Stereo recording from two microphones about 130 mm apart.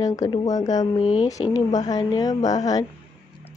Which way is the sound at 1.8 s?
30° left (ahead or behind).